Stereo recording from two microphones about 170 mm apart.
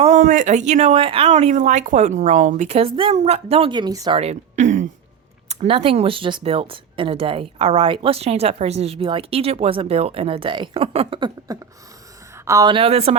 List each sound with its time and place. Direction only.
0.0 s speech: 50° right (ahead or behind); by 4.2 s 25° right (ahead or behind)
4.2 s a woman's voice: 40° right (ahead or behind)
11.5 s a sound: 20° right (ahead or behind)
12.5 s speech: 25° right (ahead or behind)